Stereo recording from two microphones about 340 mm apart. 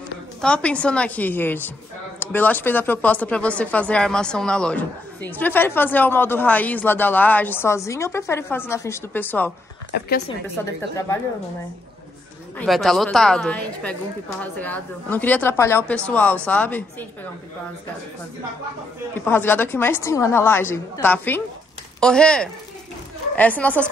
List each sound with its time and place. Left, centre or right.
0.4 s speech: centre
9.9 s speech: left
10.4 s a woman's voice: centre
12.5 s speech: centre
19.1 s a woman's voice: centre